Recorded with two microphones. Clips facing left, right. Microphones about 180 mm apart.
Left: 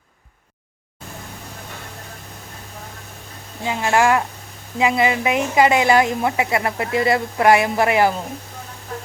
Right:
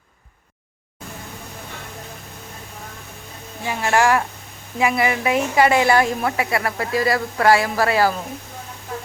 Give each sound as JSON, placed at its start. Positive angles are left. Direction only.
{"t": 3.6, "sound": "a woman's voice", "side_deg": 20}